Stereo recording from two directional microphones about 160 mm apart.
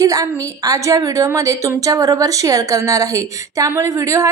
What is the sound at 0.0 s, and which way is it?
A woman's voice, 20° right (ahead or behind).